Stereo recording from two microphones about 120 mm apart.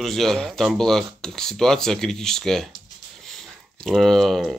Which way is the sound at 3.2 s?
5° left (ahead or behind).